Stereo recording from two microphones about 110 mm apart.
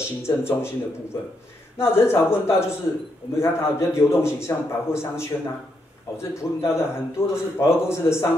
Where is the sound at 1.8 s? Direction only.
20° left (ahead or behind).